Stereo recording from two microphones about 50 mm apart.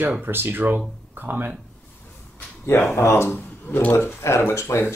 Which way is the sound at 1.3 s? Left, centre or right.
Right.